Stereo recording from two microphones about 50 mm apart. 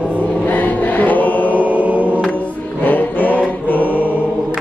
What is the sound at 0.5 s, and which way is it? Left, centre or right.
Mantra, left.